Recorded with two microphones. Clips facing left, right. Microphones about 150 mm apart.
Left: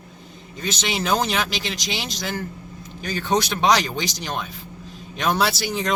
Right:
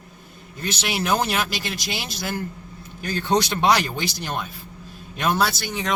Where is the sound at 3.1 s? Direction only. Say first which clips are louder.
Right 1 dB; 15° left (ahead or behind).